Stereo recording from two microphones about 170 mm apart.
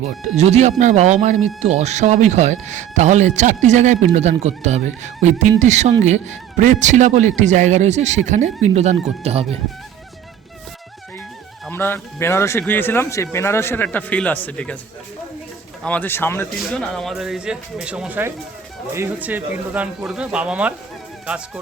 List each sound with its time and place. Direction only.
0.0 s speech: 40° right (ahead or behind)
11.7 s speech: 15° left (ahead or behind)
15.8 s speech: 10° left (ahead or behind)
16.9 s speech: centre (ahead or behind)